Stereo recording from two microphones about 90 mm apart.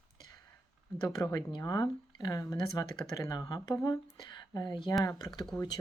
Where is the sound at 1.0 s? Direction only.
45° left (ahead or behind).